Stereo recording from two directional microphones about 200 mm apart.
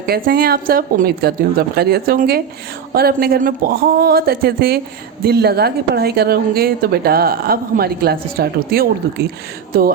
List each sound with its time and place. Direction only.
0.0 s a woman's voice: 50° right (ahead or behind)